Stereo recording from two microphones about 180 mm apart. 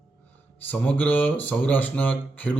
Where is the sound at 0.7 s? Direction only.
10° left (ahead or behind).